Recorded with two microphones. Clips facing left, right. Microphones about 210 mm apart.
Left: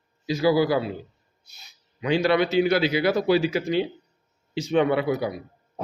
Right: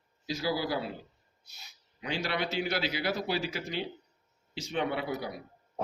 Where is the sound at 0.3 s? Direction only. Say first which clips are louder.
Left 11 dB; 90° left.